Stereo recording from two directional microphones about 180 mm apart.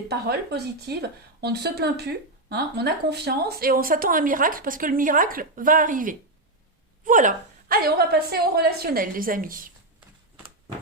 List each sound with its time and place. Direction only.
0.1 s speech: 65° right (ahead or behind)